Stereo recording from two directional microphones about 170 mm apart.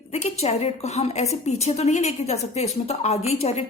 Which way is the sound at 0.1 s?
40° left (ahead or behind).